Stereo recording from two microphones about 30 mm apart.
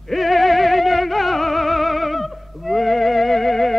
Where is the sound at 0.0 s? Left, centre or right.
Centre.